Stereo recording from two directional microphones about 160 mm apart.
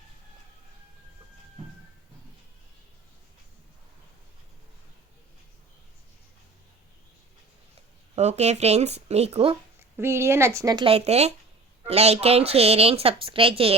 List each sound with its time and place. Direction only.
8.1 s speech: 45° right (ahead or behind)
10.0 s speech: 15° right (ahead or behind)
10.8 s speech: 40° right (ahead or behind)